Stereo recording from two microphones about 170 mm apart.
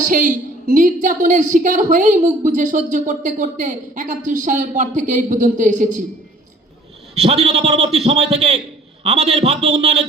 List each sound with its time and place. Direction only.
0.0 s a woman's voice: 50° right (ahead or behind)
7.2 s a man's voice: 35° right (ahead or behind)